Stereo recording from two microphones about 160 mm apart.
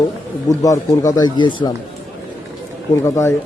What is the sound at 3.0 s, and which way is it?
Speech, 15° left (ahead or behind).